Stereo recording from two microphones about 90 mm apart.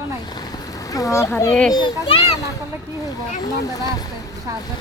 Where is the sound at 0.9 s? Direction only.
40° left (ahead or behind).